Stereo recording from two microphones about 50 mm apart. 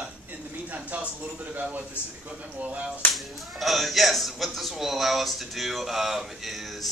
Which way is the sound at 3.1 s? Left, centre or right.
Centre.